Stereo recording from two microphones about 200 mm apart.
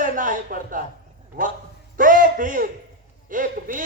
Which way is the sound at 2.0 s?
40° right (ahead or behind).